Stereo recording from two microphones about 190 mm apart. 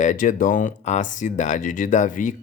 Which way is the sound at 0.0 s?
40° left (ahead or behind).